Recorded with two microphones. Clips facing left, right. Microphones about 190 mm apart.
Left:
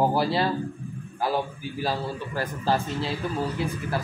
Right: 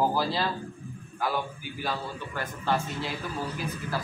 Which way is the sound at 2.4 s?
35° left (ahead or behind).